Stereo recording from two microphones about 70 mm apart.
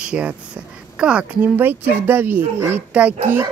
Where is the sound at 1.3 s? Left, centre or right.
Right.